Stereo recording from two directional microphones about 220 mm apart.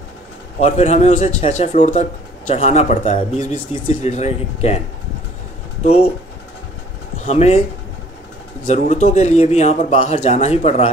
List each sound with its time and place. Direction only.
0.6 s speech: 30° left (ahead or behind)
7.2 s speech: 30° left (ahead or behind)
8.6 s speech: 30° left (ahead or behind)